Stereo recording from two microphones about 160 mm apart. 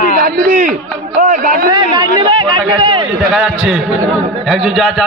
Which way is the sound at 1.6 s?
30° right (ahead or behind).